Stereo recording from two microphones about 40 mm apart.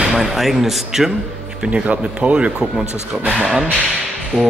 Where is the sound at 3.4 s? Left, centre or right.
Centre.